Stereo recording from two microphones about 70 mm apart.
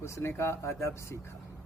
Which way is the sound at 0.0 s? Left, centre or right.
Left.